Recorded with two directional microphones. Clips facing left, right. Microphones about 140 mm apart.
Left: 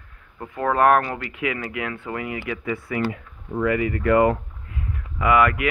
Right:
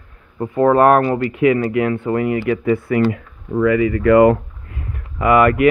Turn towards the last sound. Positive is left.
turn(degrees=-45)  # may be behind; listen again after turning